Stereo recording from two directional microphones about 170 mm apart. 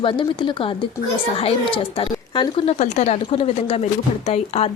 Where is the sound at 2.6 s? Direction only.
40° left (ahead or behind).